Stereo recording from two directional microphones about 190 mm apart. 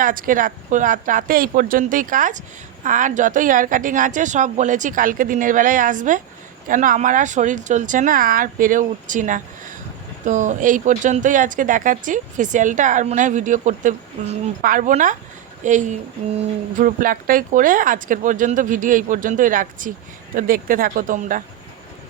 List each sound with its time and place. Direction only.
0.0 s a woman's voice: 45° right (ahead or behind)